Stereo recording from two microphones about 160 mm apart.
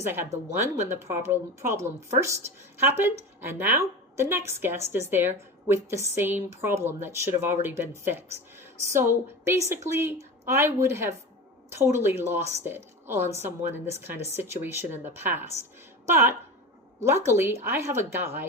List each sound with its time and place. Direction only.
0.0 s a woman's voice: 15° right (ahead or behind)